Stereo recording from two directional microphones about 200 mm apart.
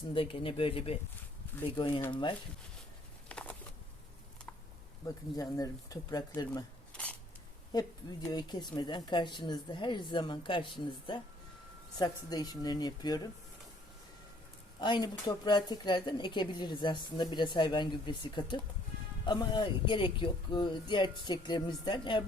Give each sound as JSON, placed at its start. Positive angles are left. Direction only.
{"t": 0.1, "sound": "a woman's voice", "side_deg": 25}
{"t": 3.2, "sound": "a sound", "side_deg": 5}
{"t": 5.0, "sound": "speech", "side_deg": 15}
{"t": 6.9, "sound": "a sound", "side_deg": 5}
{"t": 7.7, "sound": "a woman's voice", "side_deg": 20}
{"t": 14.8, "sound": "a woman's voice", "side_deg": 20}